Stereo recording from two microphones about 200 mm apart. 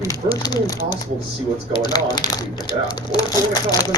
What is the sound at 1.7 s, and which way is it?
Speech, 20° left (ahead or behind).